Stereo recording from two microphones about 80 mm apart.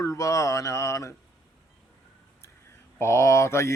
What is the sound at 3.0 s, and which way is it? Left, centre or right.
Speech, left.